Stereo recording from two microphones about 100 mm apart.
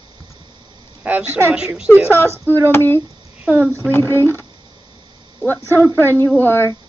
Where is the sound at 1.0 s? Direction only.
15° right (ahead or behind).